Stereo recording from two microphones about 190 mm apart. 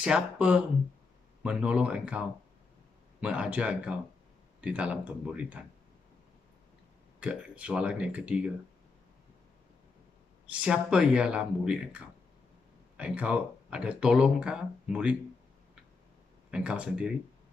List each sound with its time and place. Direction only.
0.0 s speech: 5° right (ahead or behind)
7.2 s speech: 5° right (ahead or behind)
10.5 s speech: 5° right (ahead or behind)
16.4 s speech: 5° right (ahead or behind)